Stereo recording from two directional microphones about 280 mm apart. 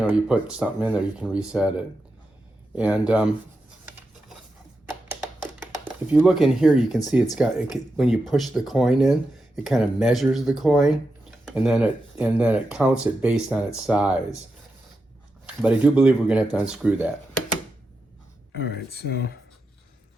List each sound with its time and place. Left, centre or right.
0.0 s speech: centre
5.8 s speech: centre
15.6 s speech: centre
18.6 s speech: left